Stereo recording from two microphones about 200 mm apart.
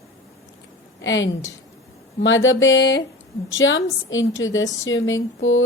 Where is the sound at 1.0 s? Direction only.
70° left (ahead or behind).